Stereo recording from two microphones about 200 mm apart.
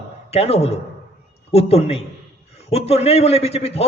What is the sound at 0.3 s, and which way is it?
A man's voice, 30° left (ahead or behind).